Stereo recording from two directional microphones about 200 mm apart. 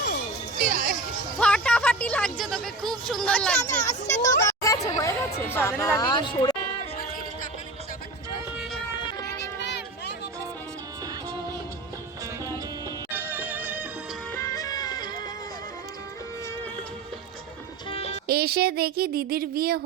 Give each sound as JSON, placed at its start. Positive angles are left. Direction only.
{"t": 0.6, "sound": "music", "side_deg": -40}
{"t": 1.4, "sound": "speech", "side_deg": 5}
{"t": 4.1, "sound": "speech", "side_deg": 15}
{"t": 9.6, "sound": "a sound", "side_deg": 60}
{"t": 13.1, "sound": "music", "side_deg": -10}
{"t": 14.3, "sound": "music", "side_deg": 15}
{"t": 17.9, "sound": "music", "side_deg": 30}
{"t": 18.3, "sound": "speech", "side_deg": -50}